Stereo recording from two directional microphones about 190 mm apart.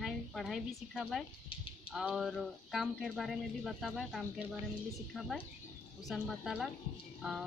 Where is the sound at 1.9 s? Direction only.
Centre (ahead or behind).